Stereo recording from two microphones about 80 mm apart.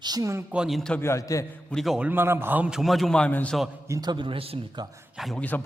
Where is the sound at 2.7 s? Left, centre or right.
Centre.